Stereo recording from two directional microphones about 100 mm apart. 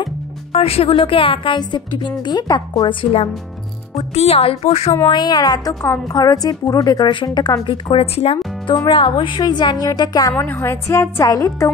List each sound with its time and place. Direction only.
0.5 s speech: 80° left
3.9 s speech: 90° left
5.0 s a woman's voice: 45° left (ahead or behind)
7.1 s speech: 50° left (ahead or behind); by 8.4 s 80° left
8.9 s a woman's voice: 50° left (ahead or behind)
10.3 s a woman's voice: 25° left (ahead or behind)